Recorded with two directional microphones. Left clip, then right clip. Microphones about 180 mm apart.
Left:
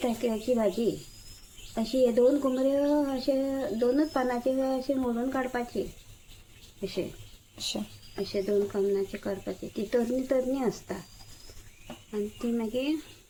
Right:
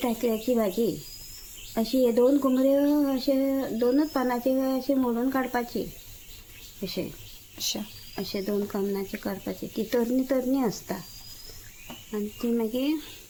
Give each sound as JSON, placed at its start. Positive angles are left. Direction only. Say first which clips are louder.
{"t": 0.0, "sound": "speech", "louder": "right 2 dB", "side_deg": -55}
{"t": 7.6, "sound": "speech", "louder": "right 3 dB", "side_deg": 0}
{"t": 8.1, "sound": "speech", "louder": "left 2 dB", "side_deg": -50}
{"t": 12.1, "sound": "speech", "louder": "right 3 dB", "side_deg": -50}